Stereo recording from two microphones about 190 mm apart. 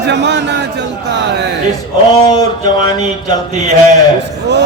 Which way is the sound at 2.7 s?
20° left (ahead or behind).